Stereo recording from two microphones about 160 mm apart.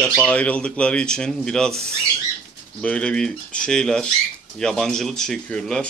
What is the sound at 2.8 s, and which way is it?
Speech, 5° left (ahead or behind).